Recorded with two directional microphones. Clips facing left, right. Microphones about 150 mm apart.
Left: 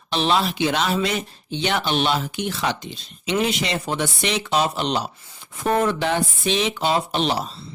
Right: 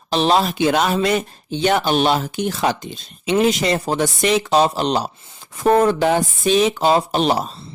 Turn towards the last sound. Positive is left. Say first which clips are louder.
# right 4 dB
turn(degrees=-45)  # may be behind; listen again after turning